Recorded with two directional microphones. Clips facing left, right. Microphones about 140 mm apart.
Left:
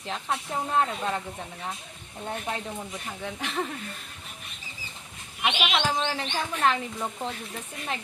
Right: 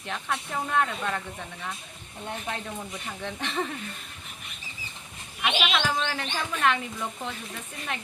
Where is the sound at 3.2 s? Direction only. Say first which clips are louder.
Right 1 dB; 5° left (ahead or behind).